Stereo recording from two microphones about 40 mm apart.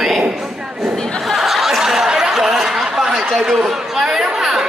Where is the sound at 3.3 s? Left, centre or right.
Centre.